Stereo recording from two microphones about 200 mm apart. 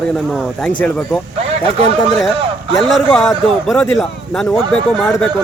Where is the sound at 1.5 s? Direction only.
30° right (ahead or behind).